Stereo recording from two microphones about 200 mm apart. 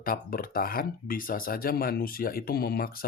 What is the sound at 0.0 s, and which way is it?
Speech, 45° left (ahead or behind).